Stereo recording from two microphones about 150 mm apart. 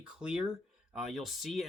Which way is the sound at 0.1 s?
5° right (ahead or behind).